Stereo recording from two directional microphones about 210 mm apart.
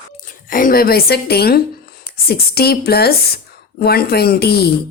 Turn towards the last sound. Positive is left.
turn(degrees=50)  # may be behind; listen again after turning